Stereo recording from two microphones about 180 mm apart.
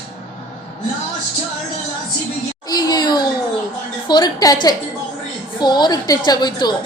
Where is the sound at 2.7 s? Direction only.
20° left (ahead or behind).